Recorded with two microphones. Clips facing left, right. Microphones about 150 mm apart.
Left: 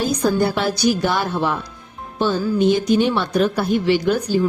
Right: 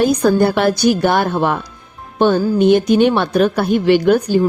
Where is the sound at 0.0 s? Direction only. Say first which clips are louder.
Right 6 dB; 60° right (ahead or behind).